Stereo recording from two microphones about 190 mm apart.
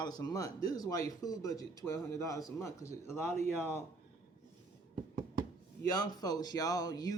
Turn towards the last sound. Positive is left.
turn(degrees=20)  # may be behind; listen again after turning